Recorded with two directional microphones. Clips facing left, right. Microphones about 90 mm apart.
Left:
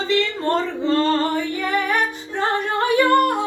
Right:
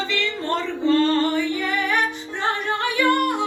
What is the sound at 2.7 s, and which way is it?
Singing, 40° left (ahead or behind).